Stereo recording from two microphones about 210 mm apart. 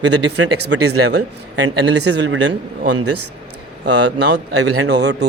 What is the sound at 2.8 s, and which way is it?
Speech, 90° right.